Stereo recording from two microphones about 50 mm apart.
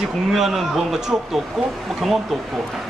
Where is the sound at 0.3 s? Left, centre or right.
Centre.